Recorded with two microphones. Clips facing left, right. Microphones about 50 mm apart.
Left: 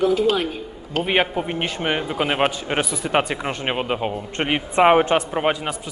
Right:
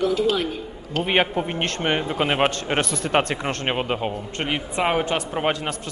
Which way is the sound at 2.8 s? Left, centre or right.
Centre.